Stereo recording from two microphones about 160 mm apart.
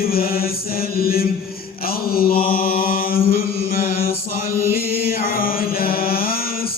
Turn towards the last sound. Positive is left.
turn(degrees=65)  # may be behind; listen again after turning